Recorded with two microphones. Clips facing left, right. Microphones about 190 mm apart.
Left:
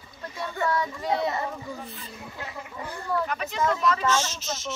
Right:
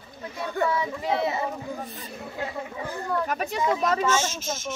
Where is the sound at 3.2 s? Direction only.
45° right (ahead or behind).